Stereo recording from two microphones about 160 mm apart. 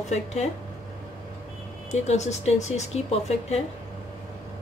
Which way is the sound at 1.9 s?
45° left (ahead or behind).